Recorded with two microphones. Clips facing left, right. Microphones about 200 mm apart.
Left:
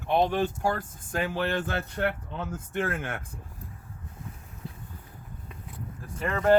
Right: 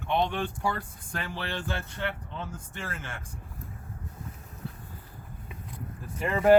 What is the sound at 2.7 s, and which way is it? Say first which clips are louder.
Speech: left 9 dB; 60° left (ahead or behind).